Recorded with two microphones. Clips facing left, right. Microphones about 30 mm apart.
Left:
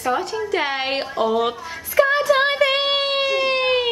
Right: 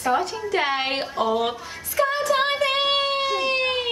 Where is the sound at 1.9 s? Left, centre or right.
Left.